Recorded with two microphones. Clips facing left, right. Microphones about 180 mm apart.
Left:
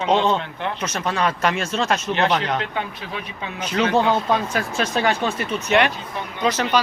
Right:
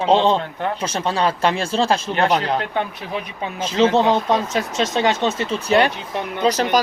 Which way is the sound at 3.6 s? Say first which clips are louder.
Right 3 dB; 25° right (ahead or behind).